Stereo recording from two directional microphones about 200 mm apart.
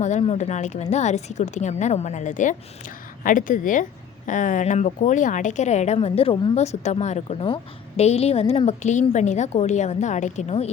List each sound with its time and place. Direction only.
0.0 s a woman's voice: 35° left (ahead or behind)